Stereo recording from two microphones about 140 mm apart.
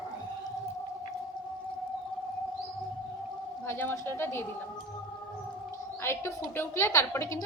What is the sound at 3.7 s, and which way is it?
Speech, 15° left (ahead or behind).